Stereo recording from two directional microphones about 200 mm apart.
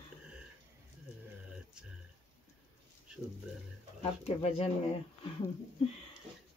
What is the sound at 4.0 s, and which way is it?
Speech, 30° left (ahead or behind).